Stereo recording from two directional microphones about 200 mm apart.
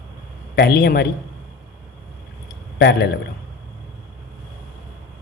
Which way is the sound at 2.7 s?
55° left (ahead or behind).